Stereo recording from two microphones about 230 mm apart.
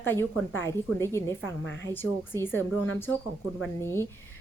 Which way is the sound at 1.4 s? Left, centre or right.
Left.